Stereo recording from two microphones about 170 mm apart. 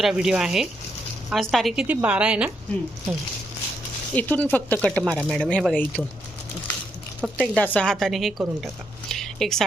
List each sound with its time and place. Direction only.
0.0 s a woman's voice: 5° right (ahead or behind)
4.1 s a woman's voice: 10° left (ahead or behind)
7.2 s speech: 5° right (ahead or behind)
7.5 s a woman's voice: 10° left (ahead or behind)